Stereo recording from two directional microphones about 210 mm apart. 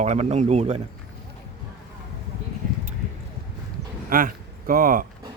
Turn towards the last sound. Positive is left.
turn(degrees=-40)  # may be behind; listen again after turning